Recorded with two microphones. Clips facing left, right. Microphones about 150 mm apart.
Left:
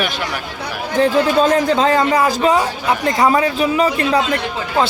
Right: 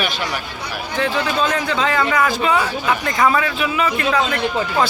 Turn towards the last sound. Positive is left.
turn(degrees=30)  # may be behind; listen again after turning